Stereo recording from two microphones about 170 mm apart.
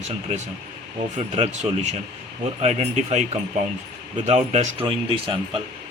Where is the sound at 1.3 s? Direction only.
40° right (ahead or behind).